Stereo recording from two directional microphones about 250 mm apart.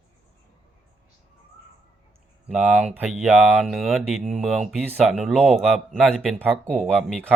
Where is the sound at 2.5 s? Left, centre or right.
Centre.